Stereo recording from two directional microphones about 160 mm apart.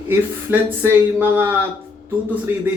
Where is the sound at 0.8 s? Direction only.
15° right (ahead or behind).